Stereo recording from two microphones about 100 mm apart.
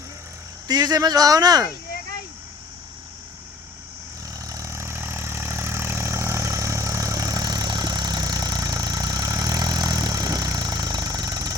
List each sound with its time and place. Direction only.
0.7 s speech: 40° right (ahead or behind)
4.4 s vehicle: 35° right (ahead or behind)